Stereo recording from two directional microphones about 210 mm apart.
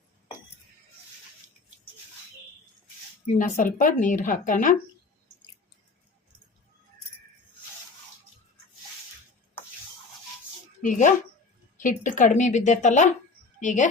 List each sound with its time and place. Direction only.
3.3 s speech: 40° left (ahead or behind)
10.8 s speech: 35° left (ahead or behind)